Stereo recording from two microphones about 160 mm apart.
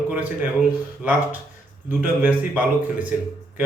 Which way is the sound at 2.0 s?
10° right (ahead or behind).